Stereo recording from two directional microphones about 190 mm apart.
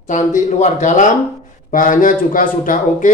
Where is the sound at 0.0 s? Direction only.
40° left (ahead or behind).